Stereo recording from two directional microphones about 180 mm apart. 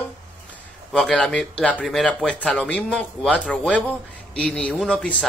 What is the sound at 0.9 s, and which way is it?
Speech, 5° left (ahead or behind).